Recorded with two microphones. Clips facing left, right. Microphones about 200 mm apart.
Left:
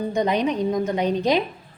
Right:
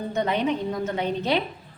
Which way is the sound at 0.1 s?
15° left (ahead or behind).